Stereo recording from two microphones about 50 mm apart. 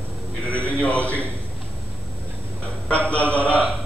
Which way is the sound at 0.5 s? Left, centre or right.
Left.